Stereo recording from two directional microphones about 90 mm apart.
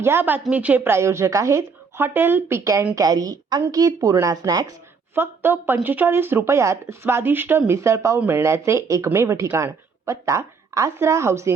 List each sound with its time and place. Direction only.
0.0 s a woman's voice: 25° right (ahead or behind)
0.9 s speech: 30° right (ahead or behind)
2.9 s a woman's voice: 45° right (ahead or behind)
5.1 s speech: 25° right (ahead or behind)
7.7 s speech: 35° right (ahead or behind)